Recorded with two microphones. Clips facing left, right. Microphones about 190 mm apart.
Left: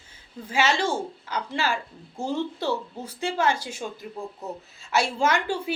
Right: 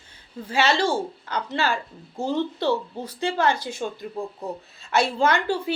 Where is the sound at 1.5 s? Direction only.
10° left (ahead or behind).